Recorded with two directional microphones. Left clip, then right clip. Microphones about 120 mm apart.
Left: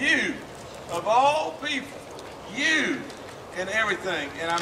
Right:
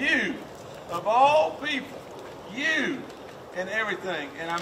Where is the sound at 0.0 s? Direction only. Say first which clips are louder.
Left 2 dB; 5° right (ahead or behind).